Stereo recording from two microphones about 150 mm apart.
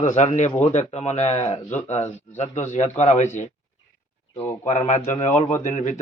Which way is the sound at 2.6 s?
50° left (ahead or behind).